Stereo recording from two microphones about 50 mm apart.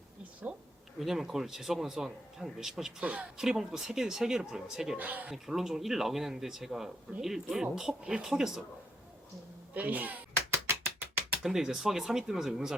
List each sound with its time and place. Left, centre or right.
0.9 s speech: centre
3.0 s speech: right
3.3 s speech: centre
4.9 s speech: right
5.3 s speech: centre
9.7 s speech: right
11.4 s speech: centre